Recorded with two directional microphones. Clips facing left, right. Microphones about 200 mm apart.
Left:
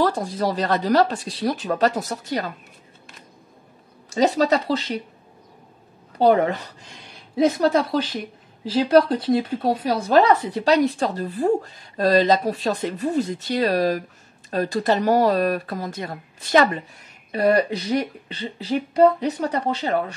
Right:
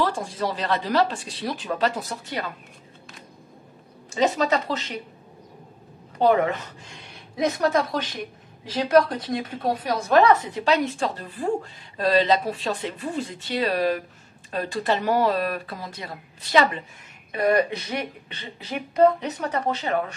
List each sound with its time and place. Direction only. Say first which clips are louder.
0.0 s speech: left 4 dB; 40° left (ahead or behind)
4.1 s speech: left 3 dB; 35° left (ahead or behind)
6.1 s speech: left 2 dB; 35° left (ahead or behind)
17.3 s speech: left 2 dB; 35° left (ahead or behind)